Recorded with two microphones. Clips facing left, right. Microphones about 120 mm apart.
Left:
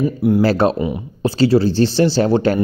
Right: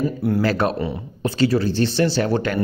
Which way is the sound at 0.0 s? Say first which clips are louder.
Left 5 dB; 10° left (ahead or behind).